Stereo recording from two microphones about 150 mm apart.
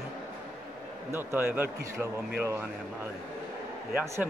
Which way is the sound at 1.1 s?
15° right (ahead or behind).